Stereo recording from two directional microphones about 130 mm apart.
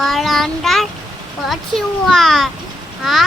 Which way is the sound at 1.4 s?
Centre (ahead or behind).